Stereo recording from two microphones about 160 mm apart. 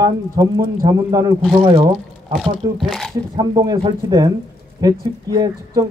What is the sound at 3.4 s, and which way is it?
Speech, 25° right (ahead or behind).